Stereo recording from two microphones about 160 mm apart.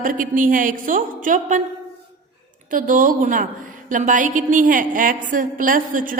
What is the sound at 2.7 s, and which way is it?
A woman's voice, 55° right (ahead or behind).